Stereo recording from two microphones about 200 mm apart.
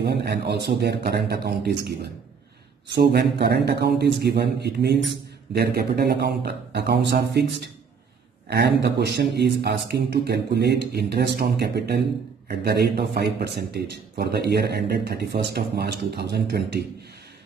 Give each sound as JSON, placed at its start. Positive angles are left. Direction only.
{"t": 0.0, "sound": "a man's voice", "side_deg": -55}
{"t": 8.5, "sound": "a man's voice", "side_deg": -55}